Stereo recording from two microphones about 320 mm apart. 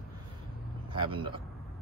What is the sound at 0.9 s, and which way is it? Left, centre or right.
Speech, centre.